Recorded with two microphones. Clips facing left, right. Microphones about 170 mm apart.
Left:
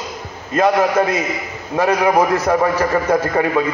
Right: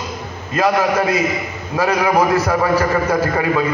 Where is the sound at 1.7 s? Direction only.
25° left (ahead or behind).